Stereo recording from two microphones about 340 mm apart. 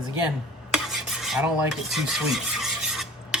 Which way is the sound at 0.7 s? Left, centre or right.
Centre.